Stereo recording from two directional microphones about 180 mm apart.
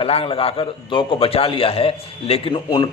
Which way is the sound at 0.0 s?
30° left (ahead or behind).